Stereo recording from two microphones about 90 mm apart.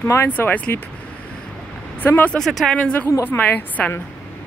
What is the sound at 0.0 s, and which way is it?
Speech, 25° left (ahead or behind).